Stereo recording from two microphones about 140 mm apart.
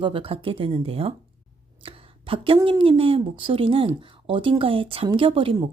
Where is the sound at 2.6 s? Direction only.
35° right (ahead or behind).